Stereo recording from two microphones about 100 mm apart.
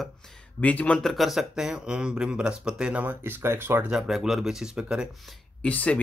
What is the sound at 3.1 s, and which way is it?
Speech, 25° right (ahead or behind).